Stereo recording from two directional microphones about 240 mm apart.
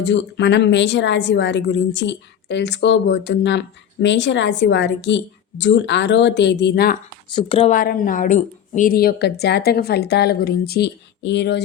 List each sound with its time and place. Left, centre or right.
0.0 s speech: left
7.3 s speech: left
7.8 s speech: left